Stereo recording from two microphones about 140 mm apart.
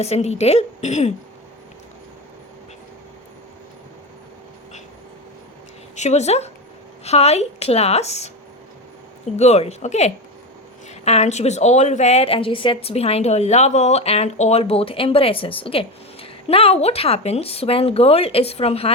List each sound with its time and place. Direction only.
0.0 s speech: 50° left (ahead or behind)
6.0 s speech: 55° left (ahead or behind)
9.3 s speech: 50° left (ahead or behind)